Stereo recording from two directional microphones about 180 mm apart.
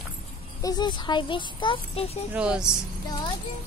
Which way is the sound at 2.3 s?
5° right (ahead or behind).